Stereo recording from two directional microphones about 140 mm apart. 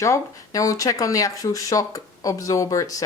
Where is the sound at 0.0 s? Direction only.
25° left (ahead or behind).